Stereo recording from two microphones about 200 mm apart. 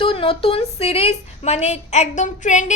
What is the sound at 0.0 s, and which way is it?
A woman's voice, 25° left (ahead or behind).